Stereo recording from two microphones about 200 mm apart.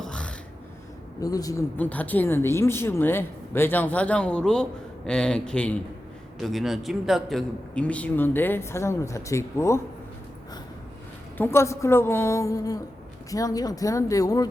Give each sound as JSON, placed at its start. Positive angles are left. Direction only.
{"t": 0.0, "sound": "a sound", "side_deg": 5}
{"t": 1.2, "sound": "a man's voice", "side_deg": 20}
{"t": 11.3, "sound": "speech", "side_deg": 10}